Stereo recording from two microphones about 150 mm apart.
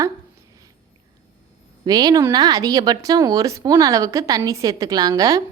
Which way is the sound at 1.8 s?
25° right (ahead or behind).